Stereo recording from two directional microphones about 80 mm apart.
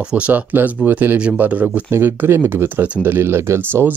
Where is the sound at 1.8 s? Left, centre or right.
Right.